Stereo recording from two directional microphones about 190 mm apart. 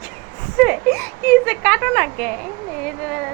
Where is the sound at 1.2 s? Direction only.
10° left (ahead or behind).